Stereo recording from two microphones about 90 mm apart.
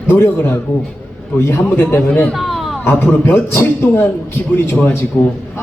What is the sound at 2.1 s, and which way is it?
Speech, 15° left (ahead or behind).